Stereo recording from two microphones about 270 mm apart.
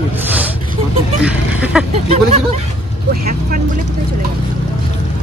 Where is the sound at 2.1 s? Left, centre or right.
Right.